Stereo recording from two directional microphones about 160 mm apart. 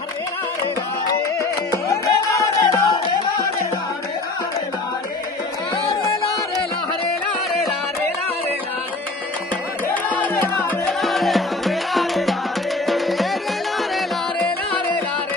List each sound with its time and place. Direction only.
1.4 s music: 20° left (ahead or behind)
10.0 s music: 10° left (ahead or behind)
11.0 s music: centre (ahead or behind)